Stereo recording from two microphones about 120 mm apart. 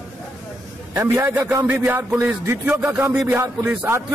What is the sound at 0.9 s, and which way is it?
Music, 20° right (ahead or behind).